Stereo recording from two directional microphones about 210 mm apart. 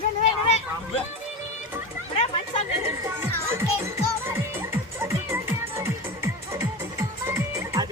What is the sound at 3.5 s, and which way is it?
Music, 10° right (ahead or behind).